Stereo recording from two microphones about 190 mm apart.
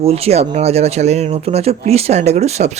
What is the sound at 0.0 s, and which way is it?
Speech, 30° right (ahead or behind).